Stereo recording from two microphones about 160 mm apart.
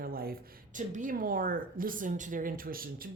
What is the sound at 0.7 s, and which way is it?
A woman's voice, 55° right (ahead or behind).